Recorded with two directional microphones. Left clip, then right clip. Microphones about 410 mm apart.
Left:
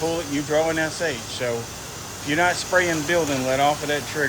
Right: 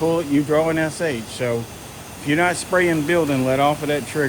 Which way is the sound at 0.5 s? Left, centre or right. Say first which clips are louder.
Right 1 dB; right.